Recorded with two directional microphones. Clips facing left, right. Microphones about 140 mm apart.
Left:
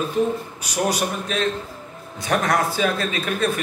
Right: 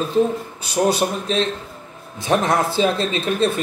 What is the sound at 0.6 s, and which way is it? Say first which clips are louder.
Speech: right 5 dB; 25° right (ahead or behind).